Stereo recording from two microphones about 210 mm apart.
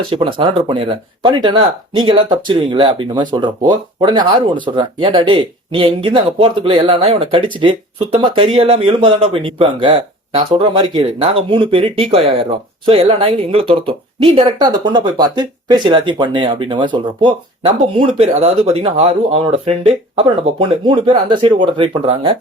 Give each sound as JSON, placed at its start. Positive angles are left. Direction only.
{"t": 0.1, "sound": "speech", "side_deg": -25}